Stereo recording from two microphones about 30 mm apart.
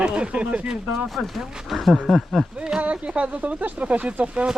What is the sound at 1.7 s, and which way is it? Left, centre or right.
Speech, centre.